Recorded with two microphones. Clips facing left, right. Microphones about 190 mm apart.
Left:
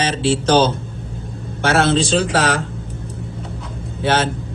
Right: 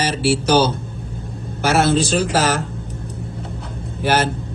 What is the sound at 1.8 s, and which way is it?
Speech, 5° right (ahead or behind).